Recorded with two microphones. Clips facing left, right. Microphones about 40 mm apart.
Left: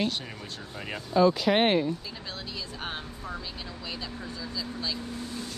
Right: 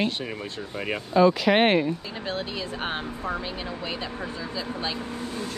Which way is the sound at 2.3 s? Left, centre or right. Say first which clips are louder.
Right 9 dB; right.